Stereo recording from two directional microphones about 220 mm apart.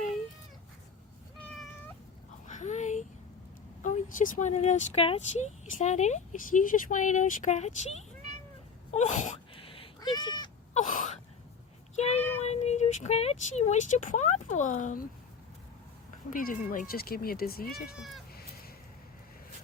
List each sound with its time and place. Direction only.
2.5 s a sound: 35° left (ahead or behind)
3.8 s speech: 35° left (ahead or behind)
8.9 s cat: 30° left (ahead or behind)
10.8 s gasp: 35° left (ahead or behind)
12.4 s speech: 30° left (ahead or behind)
16.3 s speech: 40° left (ahead or behind)
17.9 s speech: centre (ahead or behind)